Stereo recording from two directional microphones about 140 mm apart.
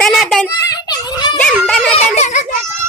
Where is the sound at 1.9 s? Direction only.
55° left (ahead or behind).